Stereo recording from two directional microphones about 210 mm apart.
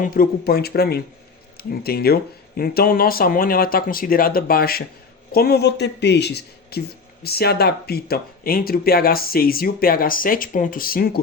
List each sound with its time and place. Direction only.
0.0 s a man's voice: 45° left (ahead or behind)